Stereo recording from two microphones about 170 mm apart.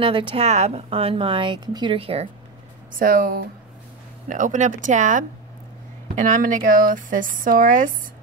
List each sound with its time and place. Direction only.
0.0 s speech: 30° right (ahead or behind)
3.0 s speech: 55° right (ahead or behind)
4.3 s speech: 50° right (ahead or behind)